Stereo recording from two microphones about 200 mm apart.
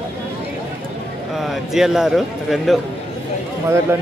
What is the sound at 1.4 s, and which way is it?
A man's voice, centre (ahead or behind).